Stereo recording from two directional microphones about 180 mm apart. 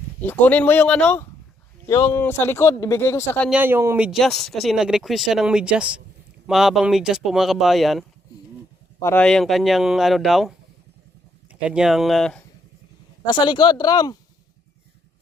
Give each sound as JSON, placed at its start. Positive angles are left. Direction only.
{"t": 0.2, "sound": "speech", "side_deg": 10}
{"t": 3.5, "sound": "speech", "side_deg": -10}
{"t": 9.0, "sound": "speech", "side_deg": 15}
{"t": 9.2, "sound": "speech", "side_deg": 0}
{"t": 11.6, "sound": "speech", "side_deg": -5}
{"t": 13.2, "sound": "speech", "side_deg": 25}